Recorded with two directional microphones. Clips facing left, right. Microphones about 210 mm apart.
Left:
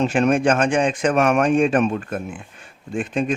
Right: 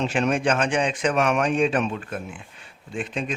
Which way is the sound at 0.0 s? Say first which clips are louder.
Left 5 dB; 50° left (ahead or behind).